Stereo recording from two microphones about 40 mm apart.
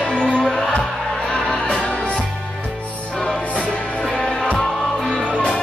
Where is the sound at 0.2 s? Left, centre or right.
Centre.